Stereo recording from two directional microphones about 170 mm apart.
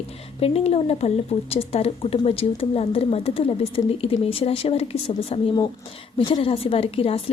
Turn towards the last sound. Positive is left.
turn(degrees=35)  # may be behind; listen again after turning